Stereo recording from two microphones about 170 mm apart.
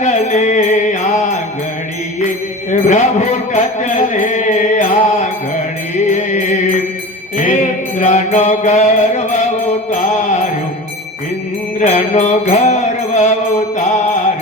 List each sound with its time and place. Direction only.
0.0 s music: 45° left (ahead or behind)
2.6 s music: 45° left (ahead or behind)
7.3 s mantra: 45° left (ahead or behind)
11.8 s mantra: 45° left (ahead or behind)